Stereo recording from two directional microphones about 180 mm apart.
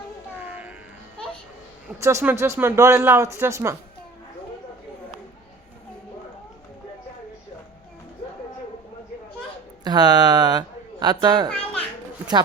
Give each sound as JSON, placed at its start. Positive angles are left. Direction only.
{"t": 2.0, "sound": "speech", "side_deg": -15}
{"t": 9.8, "sound": "speech", "side_deg": -20}
{"t": 11.4, "sound": "children playing", "side_deg": 5}